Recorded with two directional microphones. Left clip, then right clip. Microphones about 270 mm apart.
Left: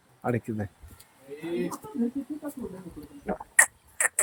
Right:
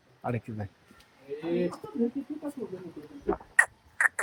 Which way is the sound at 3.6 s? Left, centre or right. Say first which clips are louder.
Even; left.